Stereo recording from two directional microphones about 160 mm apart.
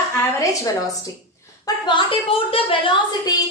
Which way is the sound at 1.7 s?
25° left (ahead or behind).